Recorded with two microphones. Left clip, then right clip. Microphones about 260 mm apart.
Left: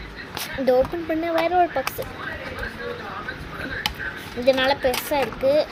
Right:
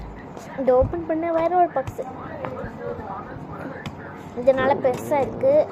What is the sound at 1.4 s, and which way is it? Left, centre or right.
Speech, left.